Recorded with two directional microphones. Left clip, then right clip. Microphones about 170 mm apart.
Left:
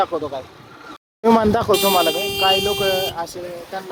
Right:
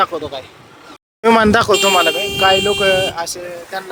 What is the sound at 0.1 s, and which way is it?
Speech, 20° right (ahead or behind).